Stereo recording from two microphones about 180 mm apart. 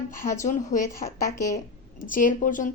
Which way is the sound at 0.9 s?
15° left (ahead or behind).